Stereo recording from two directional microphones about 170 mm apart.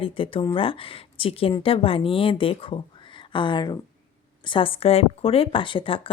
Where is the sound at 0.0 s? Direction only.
30° left (ahead or behind).